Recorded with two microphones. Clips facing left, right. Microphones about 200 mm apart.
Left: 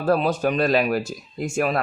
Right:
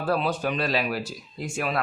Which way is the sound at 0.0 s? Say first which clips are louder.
Left 5 dB; 45° left (ahead or behind).